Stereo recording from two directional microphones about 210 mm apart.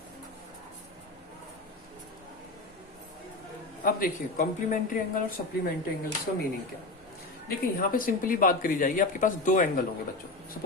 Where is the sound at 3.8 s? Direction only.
40° left (ahead or behind).